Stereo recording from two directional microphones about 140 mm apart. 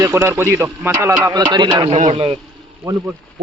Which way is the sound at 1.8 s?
50° right (ahead or behind).